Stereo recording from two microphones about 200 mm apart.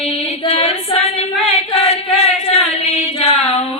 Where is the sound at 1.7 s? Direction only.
30° left (ahead or behind).